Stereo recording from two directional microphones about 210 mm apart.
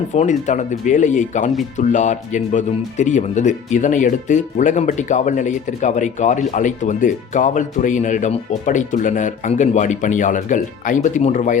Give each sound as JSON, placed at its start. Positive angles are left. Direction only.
{"t": 0.1, "sound": "speech", "side_deg": 35}